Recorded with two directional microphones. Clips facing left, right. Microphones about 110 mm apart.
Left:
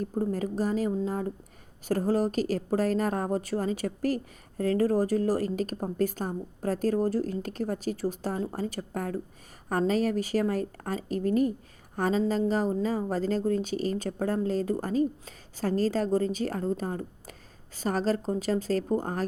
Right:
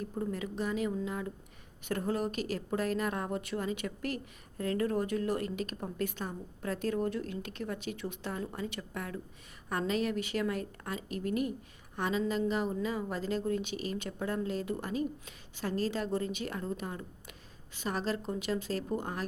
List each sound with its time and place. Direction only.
0.0 s a woman's voice: 40° left (ahead or behind)